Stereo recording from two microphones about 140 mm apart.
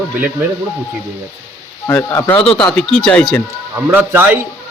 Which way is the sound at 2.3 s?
40° left (ahead or behind).